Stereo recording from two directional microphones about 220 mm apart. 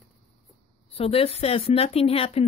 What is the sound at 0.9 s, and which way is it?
Speech, 25° left (ahead or behind).